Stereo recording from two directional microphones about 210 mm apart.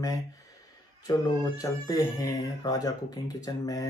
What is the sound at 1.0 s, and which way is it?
Speech, 20° left (ahead or behind).